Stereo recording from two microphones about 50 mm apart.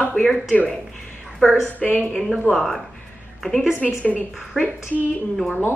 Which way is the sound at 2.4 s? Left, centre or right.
Centre.